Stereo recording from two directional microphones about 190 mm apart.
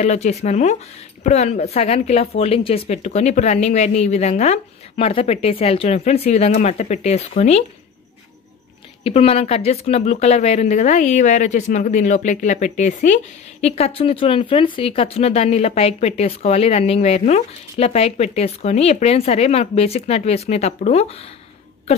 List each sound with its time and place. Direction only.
0.0 s speech: 35° left (ahead or behind)
9.0 s speech: 30° left (ahead or behind)